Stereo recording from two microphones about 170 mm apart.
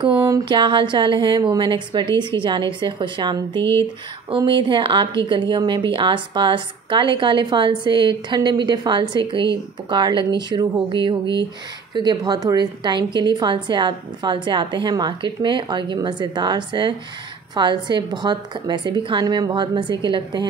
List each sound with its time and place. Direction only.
0.5 s a woman's voice: 30° right (ahead or behind)